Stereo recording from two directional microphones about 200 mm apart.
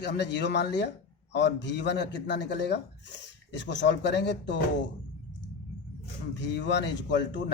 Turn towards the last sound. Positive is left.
turn(degrees=60)  # may be behind; listen again after turning